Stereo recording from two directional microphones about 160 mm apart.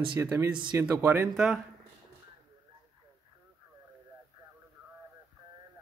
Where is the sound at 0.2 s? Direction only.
20° right (ahead or behind).